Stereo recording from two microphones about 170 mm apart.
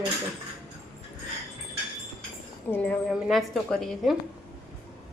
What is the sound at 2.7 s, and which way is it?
A woman's voice, 10° left (ahead or behind).